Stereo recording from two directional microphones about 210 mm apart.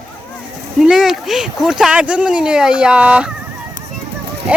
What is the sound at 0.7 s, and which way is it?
Speech, centre (ahead or behind).